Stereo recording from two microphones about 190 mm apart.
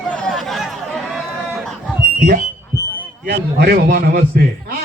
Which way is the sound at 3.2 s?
55° right (ahead or behind).